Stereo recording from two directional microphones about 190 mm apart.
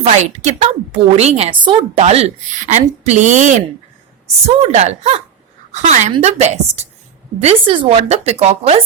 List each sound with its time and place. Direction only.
0.0 s a woman's voice: 35° right (ahead or behind)